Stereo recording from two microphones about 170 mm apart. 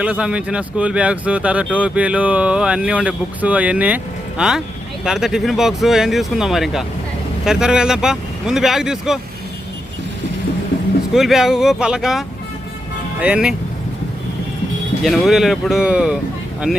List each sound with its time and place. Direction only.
0.0 s speech: 5° right (ahead or behind)
11.1 s speech: centre (ahead or behind)
15.0 s speech: centre (ahead or behind)